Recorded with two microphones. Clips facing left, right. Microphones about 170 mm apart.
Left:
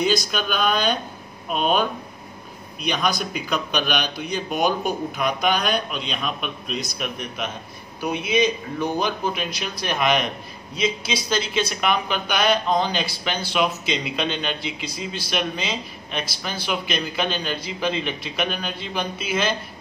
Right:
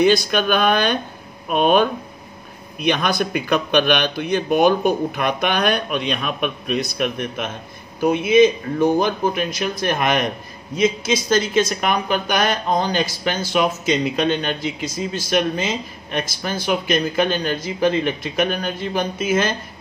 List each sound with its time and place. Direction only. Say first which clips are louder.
0.0 s a man's voice: right 6 dB; 60° right (ahead or behind)